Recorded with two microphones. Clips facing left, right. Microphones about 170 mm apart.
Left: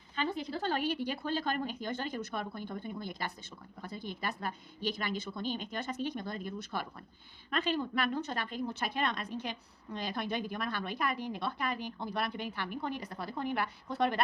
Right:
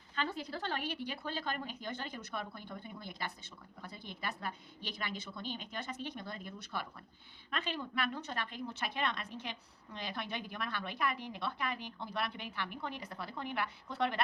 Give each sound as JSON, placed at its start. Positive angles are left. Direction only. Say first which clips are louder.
{"t": 0.2, "sound": "a woman's voice", "louder": "left 4 dB", "side_deg": 15}
{"t": 0.6, "sound": "a woman's voice", "louder": "left 8 dB", "side_deg": 35}